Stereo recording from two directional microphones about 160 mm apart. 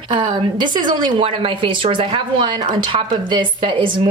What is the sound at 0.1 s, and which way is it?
Speech, 30° right (ahead or behind).